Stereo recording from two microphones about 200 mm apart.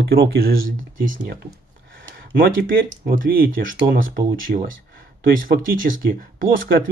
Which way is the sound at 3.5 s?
70° right (ahead or behind).